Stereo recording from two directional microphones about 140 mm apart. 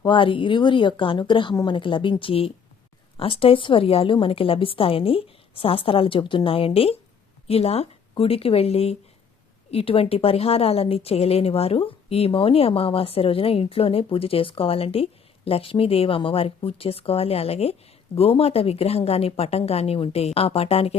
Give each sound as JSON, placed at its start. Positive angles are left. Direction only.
{"t": 0.0, "sound": "a woman's voice", "side_deg": 35}